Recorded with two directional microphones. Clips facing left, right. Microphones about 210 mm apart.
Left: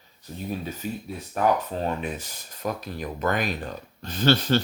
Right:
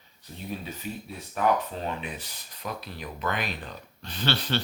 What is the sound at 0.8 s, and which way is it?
Speech, 45° left (ahead or behind).